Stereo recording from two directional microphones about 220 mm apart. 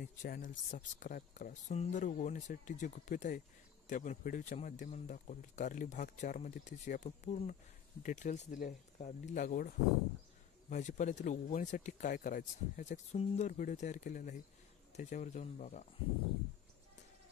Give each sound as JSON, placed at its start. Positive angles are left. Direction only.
{"t": 0.0, "sound": "speech", "side_deg": 35}
{"t": 10.7, "sound": "speech", "side_deg": 35}